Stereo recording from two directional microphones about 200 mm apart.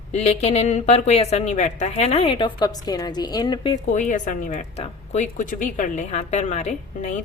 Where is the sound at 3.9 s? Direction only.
40° left (ahead or behind).